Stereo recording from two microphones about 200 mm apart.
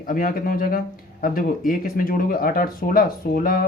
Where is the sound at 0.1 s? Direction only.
45° left (ahead or behind).